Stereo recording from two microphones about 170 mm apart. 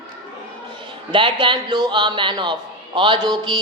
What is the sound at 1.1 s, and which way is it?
A woman's voice, 30° right (ahead or behind).